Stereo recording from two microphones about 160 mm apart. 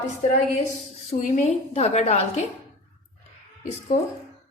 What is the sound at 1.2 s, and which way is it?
A woman's voice, 50° left (ahead or behind).